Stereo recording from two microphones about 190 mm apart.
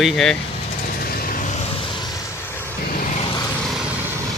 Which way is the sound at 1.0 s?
50° left (ahead or behind).